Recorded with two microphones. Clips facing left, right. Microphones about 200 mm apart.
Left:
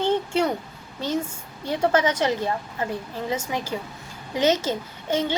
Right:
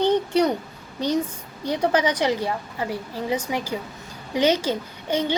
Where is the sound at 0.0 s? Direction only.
15° right (ahead or behind).